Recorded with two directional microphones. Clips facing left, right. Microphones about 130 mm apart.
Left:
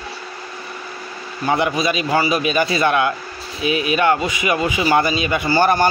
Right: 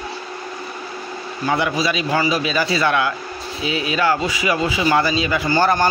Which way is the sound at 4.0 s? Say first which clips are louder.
Right 2 dB; 20° left (ahead or behind).